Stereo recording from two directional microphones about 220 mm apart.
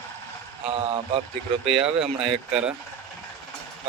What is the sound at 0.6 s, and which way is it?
Speech, 25° right (ahead or behind).